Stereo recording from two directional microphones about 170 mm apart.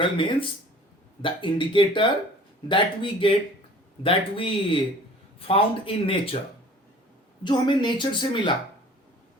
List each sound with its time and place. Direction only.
0.0 s a woman's voice: 30° left (ahead or behind)
7.4 s a woman's voice: 25° left (ahead or behind)